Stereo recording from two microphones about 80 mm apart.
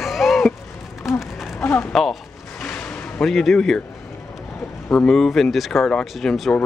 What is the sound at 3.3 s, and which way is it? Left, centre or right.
Speech, centre.